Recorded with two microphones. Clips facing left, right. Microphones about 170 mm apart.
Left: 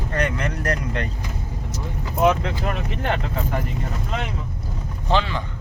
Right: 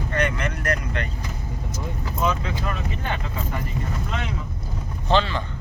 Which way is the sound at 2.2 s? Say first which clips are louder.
Left 6 dB; 70° left (ahead or behind).